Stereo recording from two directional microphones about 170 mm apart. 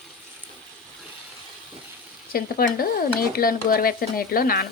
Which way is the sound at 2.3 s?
60° left (ahead or behind).